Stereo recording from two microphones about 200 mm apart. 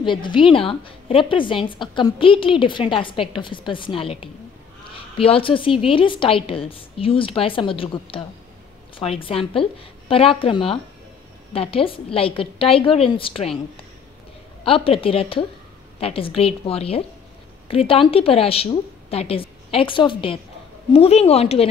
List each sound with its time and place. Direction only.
0.0 s a woman's voice: 25° left (ahead or behind)
14.6 s a woman's voice: 25° left (ahead or behind)